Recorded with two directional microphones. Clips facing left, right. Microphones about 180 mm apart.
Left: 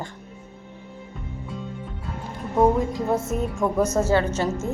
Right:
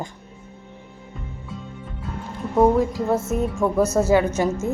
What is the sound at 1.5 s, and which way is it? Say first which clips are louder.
Music: left 2 dB; centre (ahead or behind).